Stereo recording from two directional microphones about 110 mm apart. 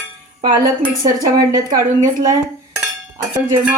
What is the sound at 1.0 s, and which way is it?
A woman's voice, 35° right (ahead or behind).